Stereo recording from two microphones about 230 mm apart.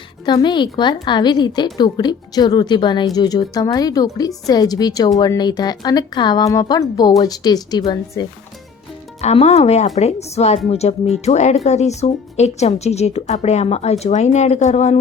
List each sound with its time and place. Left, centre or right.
0.3 s a woman's voice: centre
9.2 s speech: left